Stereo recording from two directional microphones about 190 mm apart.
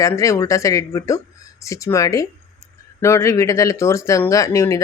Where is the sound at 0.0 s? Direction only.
15° left (ahead or behind).